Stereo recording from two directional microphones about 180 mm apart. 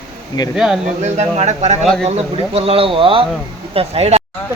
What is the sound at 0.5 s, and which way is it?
Speech, 5° right (ahead or behind).